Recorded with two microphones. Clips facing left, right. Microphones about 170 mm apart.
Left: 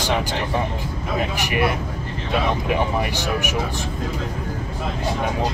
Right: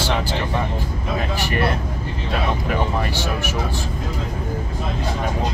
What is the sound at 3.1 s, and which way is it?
Speech, 15° left (ahead or behind).